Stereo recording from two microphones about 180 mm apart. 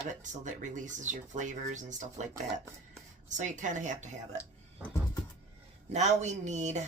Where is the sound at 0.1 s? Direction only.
45° right (ahead or behind).